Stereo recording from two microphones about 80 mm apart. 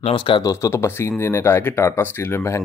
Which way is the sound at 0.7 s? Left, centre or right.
Left.